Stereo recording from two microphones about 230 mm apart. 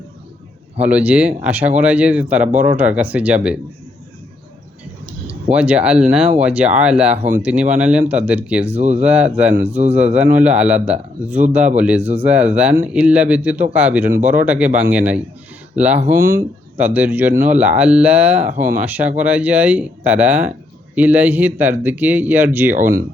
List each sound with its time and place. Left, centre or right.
0.8 s speech: centre
5.3 s speech: centre
8.6 s speech: right
9.0 s speech: centre
9.6 s speech: right
10.3 s speech: centre